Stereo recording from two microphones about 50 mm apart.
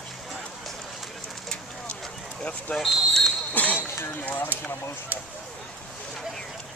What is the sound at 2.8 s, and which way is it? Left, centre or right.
Speech, centre.